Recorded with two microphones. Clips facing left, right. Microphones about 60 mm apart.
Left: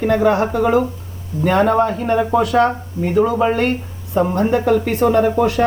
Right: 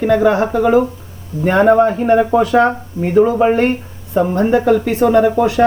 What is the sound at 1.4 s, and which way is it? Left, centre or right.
Speech, centre.